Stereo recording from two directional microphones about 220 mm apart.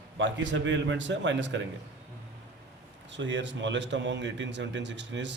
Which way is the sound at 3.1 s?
55° right (ahead or behind).